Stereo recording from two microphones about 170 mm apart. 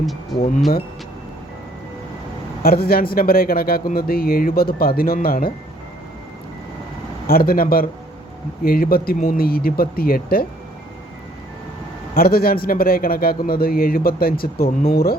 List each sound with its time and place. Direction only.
0.0 s speech: centre (ahead or behind)
2.6 s speech: 60° left (ahead or behind)
7.3 s speech: 60° left (ahead or behind)
12.1 s speech: 60° left (ahead or behind)